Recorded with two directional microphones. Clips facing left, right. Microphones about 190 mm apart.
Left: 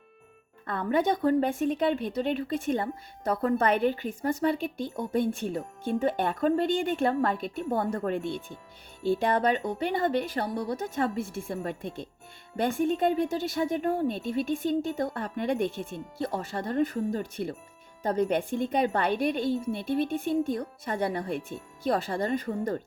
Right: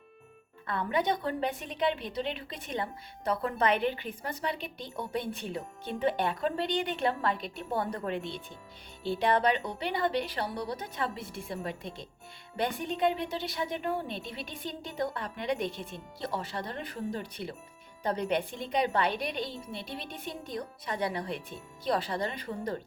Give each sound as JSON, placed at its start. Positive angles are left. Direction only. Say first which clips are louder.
{"t": 0.7, "sound": "a woman's voice", "louder": "left 4 dB", "side_deg": 45}